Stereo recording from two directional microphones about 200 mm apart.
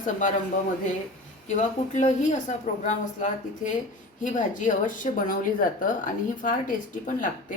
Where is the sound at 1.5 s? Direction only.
35° left (ahead or behind).